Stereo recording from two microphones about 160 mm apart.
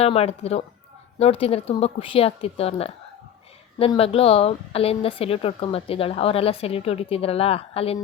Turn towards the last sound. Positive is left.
turn(degrees=35)  # may be behind; listen again after turning